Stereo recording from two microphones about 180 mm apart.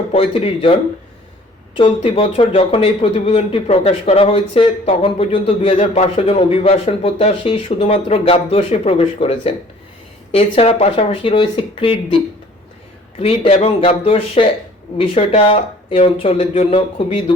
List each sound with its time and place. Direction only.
0.1 s speech: 30° left (ahead or behind)